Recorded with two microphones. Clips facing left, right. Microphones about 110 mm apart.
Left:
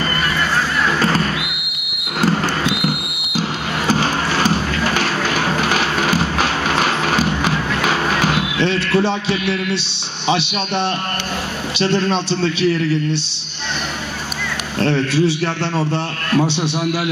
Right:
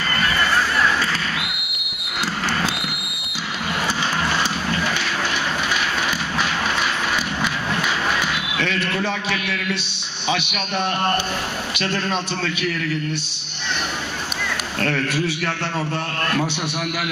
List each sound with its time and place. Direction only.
3.3 s a sound: 45° left (ahead or behind); by 5.9 s 60° left (ahead or behind)
6.0 s music: 45° left (ahead or behind); by 7.9 s 80° left
8.1 s basketball bounce: 55° left (ahead or behind)
8.4 s a man's voice: 30° left (ahead or behind)
14.8 s a man's voice: 25° left (ahead or behind)